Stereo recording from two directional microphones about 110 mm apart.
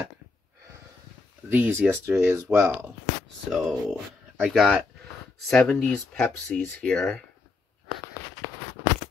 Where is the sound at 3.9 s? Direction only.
10° right (ahead or behind).